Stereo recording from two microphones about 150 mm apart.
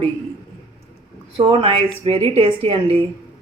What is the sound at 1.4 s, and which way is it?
Speech, 35° right (ahead or behind).